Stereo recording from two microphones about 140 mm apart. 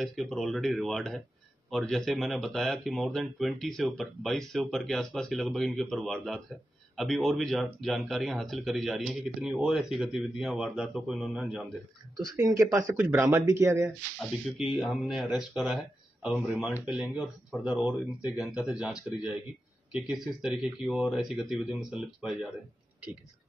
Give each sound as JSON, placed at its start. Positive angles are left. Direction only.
{"t": 0.0, "sound": "speech", "side_deg": 0}
{"t": 12.2, "sound": "speech", "side_deg": -25}
{"t": 14.6, "sound": "speech", "side_deg": 0}